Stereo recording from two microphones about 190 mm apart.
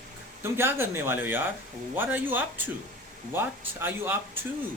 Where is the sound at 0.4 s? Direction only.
10° right (ahead or behind).